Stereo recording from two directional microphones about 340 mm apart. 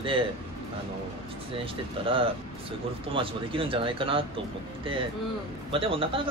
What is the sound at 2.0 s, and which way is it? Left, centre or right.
Speech, centre.